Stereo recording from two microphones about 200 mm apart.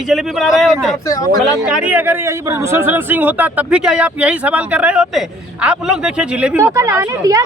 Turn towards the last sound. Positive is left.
turn(degrees=-15)  # may be behind; listen again after turning